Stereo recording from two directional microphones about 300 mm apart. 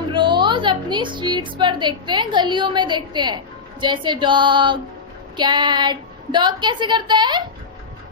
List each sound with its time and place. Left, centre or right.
0.1 s a woman's voice: centre